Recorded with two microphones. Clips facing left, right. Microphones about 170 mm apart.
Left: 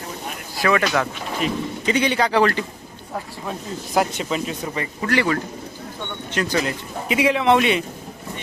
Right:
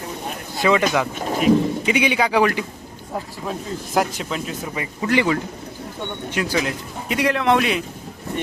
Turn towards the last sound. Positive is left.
turn(degrees=0)  # may be behind; listen again after turning